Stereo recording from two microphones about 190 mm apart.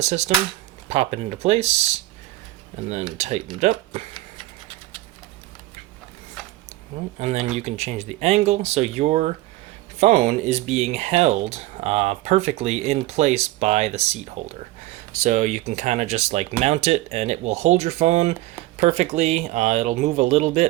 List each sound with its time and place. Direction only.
0.0 s speech: 35° right (ahead or behind)
3.2 s speech: 35° right (ahead or behind)
7.2 s speech: 35° right (ahead or behind)